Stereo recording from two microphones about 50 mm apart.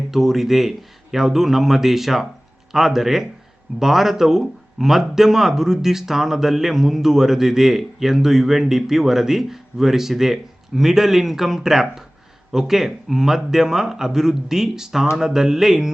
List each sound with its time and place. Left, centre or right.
0.1 s a man's voice: centre